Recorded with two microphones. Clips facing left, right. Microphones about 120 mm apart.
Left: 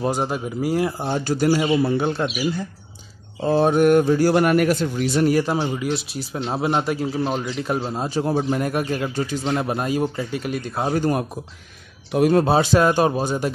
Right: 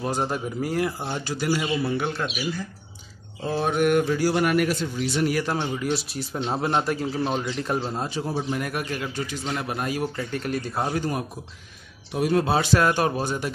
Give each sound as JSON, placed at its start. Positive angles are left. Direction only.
{"t": 0.1, "sound": "speech", "side_deg": 10}
{"t": 0.7, "sound": "speech", "side_deg": 30}
{"t": 1.2, "sound": "speech", "side_deg": 40}
{"t": 3.5, "sound": "speech", "side_deg": 35}
{"t": 5.6, "sound": "a man's voice", "side_deg": 5}
{"t": 8.1, "sound": "speech", "side_deg": 50}
{"t": 8.5, "sound": "speech", "side_deg": 30}
{"t": 10.3, "sound": "speech", "side_deg": 10}
{"t": 11.0, "sound": "speech", "side_deg": 50}
{"t": 12.4, "sound": "speech", "side_deg": 25}